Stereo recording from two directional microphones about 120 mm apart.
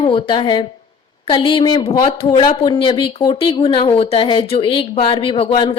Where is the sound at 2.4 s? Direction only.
35° left (ahead or behind).